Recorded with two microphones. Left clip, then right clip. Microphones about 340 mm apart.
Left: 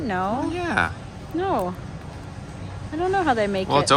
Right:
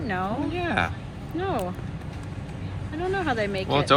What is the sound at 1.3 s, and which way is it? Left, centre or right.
Speech, left.